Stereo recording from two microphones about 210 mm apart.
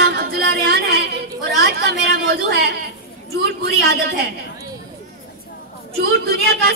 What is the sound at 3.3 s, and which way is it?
Speech, 50° right (ahead or behind).